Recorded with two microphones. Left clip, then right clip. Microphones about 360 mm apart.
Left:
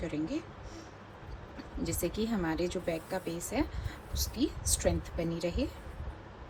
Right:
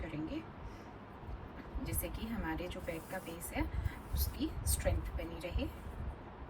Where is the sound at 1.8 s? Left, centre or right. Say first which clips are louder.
Left 11 dB; centre.